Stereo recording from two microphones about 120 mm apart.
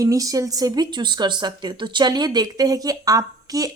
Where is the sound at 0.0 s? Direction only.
30° right (ahead or behind).